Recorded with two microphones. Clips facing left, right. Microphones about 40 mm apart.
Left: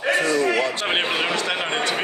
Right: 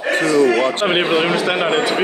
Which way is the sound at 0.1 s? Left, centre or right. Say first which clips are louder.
Right 6 dB; right.